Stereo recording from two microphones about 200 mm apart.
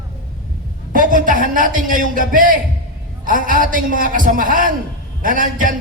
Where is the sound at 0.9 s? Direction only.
40° right (ahead or behind).